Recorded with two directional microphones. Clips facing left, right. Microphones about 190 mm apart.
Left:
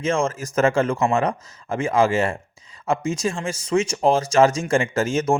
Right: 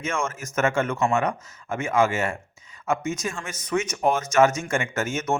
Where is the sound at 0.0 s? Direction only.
35° left (ahead or behind).